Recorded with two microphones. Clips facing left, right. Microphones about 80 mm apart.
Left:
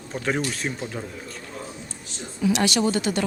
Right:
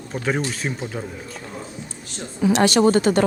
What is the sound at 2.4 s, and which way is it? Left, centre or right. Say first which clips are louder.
Speech: right 6 dB; right.